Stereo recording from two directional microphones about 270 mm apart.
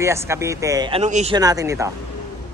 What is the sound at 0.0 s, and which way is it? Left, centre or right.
A man's voice, centre.